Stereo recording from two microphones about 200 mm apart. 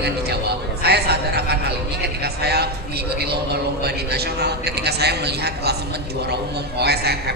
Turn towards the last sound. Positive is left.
turn(degrees=-55)  # may be behind; listen again after turning